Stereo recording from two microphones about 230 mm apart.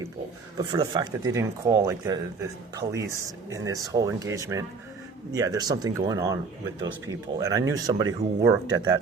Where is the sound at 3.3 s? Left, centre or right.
Centre.